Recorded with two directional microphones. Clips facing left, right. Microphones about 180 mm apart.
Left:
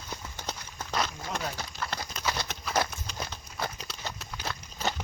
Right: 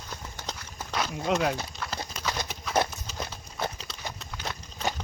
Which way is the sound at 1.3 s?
80° right.